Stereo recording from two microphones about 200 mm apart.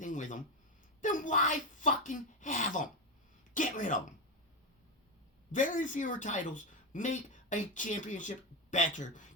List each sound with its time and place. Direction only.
0.0 s a sound: 40° left (ahead or behind)
1.0 s speech: 40° left (ahead or behind)
5.5 s speech: 40° left (ahead or behind)